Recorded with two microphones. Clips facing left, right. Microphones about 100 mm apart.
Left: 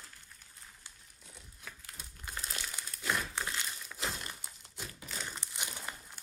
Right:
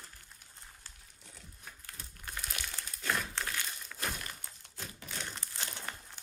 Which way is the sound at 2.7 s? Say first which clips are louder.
Even; 10° left (ahead or behind).